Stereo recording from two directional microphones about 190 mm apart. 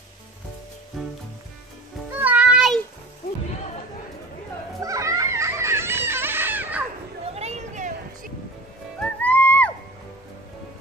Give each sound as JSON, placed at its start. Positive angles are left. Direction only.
{"t": 1.0, "sound": "music", "side_deg": 0}
{"t": 2.1, "sound": "music", "side_deg": -10}
{"t": 4.8, "sound": "a sound", "side_deg": -15}
{"t": 7.3, "sound": "music", "side_deg": -35}
{"t": 9.2, "sound": "music", "side_deg": 10}